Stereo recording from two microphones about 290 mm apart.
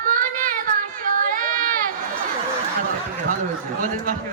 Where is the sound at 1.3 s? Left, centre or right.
Right.